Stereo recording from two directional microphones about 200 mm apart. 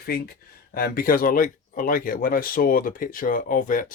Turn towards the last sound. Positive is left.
turn(degrees=40)  # may be behind; listen again after turning